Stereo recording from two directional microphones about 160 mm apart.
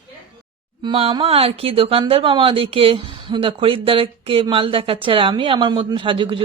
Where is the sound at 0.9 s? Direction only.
40° right (ahead or behind).